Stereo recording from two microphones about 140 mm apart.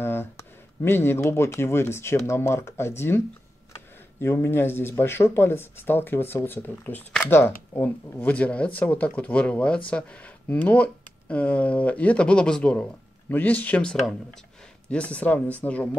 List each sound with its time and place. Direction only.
0.0 s speech: 15° left (ahead or behind)
4.2 s speech: 15° left (ahead or behind)